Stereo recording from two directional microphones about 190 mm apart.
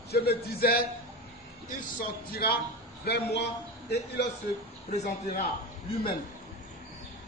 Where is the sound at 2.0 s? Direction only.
55° left (ahead or behind).